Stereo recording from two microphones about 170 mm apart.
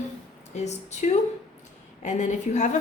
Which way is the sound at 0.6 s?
40° left (ahead or behind).